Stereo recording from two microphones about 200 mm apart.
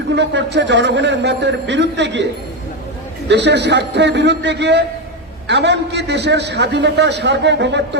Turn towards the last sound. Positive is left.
turn(degrees=-60)  # may be behind; listen again after turning